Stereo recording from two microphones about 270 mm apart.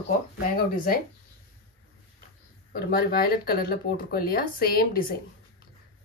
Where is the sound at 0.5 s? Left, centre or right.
Left.